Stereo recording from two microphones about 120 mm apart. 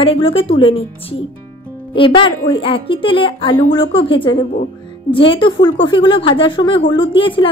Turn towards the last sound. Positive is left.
turn(degrees=45)  # may be behind; listen again after turning